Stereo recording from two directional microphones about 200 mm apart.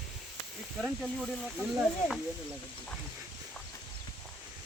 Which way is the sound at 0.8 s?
5° left (ahead or behind).